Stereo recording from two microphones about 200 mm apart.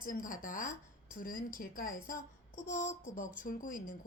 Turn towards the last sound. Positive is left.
turn(degrees=45)  # may be behind; listen again after turning